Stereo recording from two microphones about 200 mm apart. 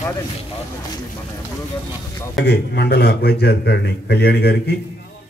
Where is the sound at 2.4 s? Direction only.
55° left (ahead or behind).